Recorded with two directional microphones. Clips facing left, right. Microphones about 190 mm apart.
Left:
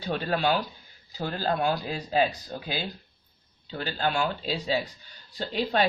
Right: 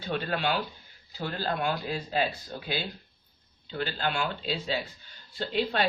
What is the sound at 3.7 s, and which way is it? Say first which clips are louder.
Speech: left 2 dB; 40° left (ahead or behind).